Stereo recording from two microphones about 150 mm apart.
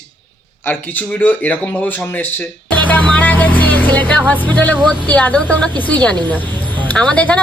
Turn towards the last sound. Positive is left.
turn(degrees=10)  # may be behind; listen again after turning